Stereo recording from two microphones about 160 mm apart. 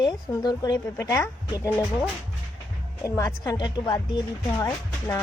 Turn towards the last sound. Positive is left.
turn(degrees=20)  # may be behind; listen again after turning